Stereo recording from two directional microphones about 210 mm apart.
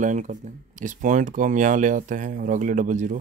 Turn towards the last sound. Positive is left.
turn(degrees=-35)  # may be behind; listen again after turning